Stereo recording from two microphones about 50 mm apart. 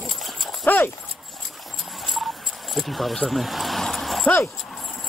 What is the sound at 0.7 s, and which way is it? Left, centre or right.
Dog, left.